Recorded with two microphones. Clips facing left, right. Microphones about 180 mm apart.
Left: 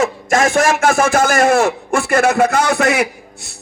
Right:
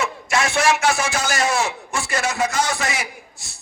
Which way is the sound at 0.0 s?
45° left (ahead or behind).